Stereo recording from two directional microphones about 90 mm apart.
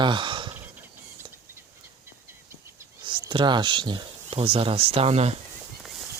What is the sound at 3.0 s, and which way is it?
Speech, 60° right (ahead or behind).